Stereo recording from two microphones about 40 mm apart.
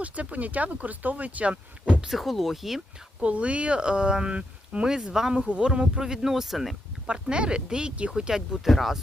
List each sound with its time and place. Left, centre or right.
0.0 s speech: right
2.0 s speech: centre
3.2 s speech: right; by 6.7 s centre
7.1 s speech: right; by 9.0 s centre